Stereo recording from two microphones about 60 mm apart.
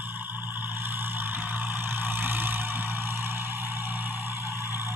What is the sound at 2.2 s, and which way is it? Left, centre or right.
Vehicle, right.